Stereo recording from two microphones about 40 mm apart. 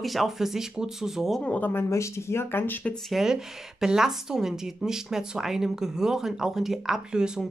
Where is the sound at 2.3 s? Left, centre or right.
Left.